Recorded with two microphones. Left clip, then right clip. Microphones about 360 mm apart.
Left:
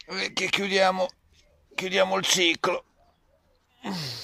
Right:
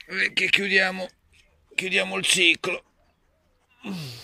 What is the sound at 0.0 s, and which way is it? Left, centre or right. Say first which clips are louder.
Speech: right 5 dB; centre.